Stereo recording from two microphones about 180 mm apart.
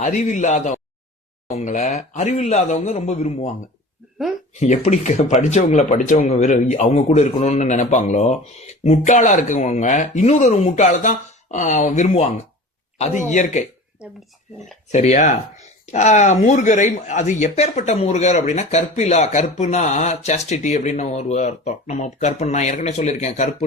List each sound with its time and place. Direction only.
0.0 s speech: 40° left (ahead or behind)
4.6 s speech: 40° left (ahead or behind)
13.3 s speech: 45° left (ahead or behind)
14.9 s speech: 40° left (ahead or behind)